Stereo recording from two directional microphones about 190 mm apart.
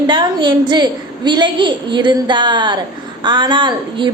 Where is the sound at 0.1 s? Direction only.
25° right (ahead or behind).